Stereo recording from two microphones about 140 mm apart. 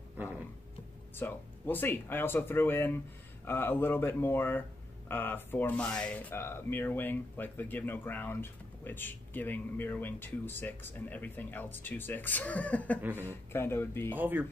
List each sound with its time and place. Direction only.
1.1 s speech: 15° left (ahead or behind)
14.1 s speech: 15° right (ahead or behind)